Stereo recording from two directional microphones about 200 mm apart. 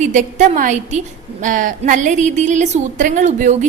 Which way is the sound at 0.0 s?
40° right (ahead or behind).